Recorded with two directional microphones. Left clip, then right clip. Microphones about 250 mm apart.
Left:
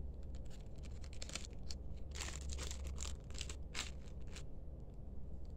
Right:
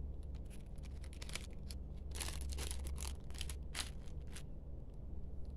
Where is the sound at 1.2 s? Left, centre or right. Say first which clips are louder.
Even; centre.